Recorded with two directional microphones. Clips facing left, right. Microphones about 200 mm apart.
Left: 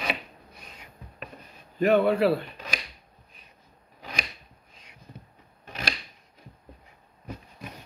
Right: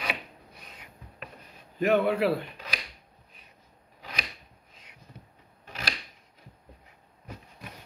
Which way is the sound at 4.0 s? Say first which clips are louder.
Left 3 dB; 25° left (ahead or behind).